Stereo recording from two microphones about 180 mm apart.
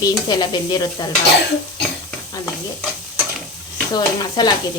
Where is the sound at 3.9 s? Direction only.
25° left (ahead or behind).